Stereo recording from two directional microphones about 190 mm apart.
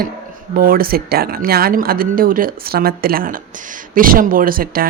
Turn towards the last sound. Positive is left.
turn(degrees=-50)  # may be behind; listen again after turning